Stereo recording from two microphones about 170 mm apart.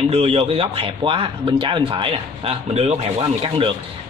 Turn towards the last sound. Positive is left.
turn(degrees=-30)  # may be behind; listen again after turning